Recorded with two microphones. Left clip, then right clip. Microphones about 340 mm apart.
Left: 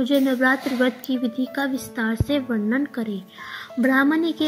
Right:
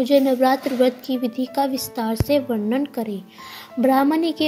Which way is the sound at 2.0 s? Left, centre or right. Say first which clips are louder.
Right 4 dB; right.